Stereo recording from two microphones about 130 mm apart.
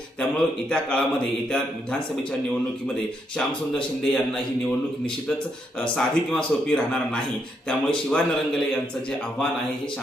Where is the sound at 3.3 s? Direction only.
5° left (ahead or behind).